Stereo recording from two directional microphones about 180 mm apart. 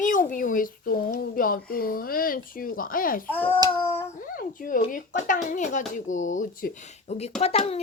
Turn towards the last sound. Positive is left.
turn(degrees=35)  # may be behind; listen again after turning